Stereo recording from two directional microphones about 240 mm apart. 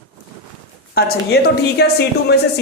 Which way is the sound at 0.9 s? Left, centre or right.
Left.